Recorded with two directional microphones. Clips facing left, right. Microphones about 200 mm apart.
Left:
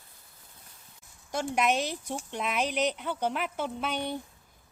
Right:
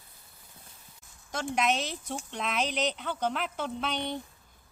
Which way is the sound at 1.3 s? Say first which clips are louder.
Left 2 dB; 10° left (ahead or behind).